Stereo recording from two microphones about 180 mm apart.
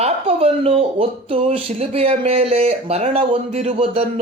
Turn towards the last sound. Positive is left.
turn(degrees=-35)  # may be behind; listen again after turning